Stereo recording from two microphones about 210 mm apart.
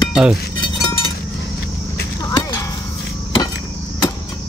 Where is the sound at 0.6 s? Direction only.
20° left (ahead or behind).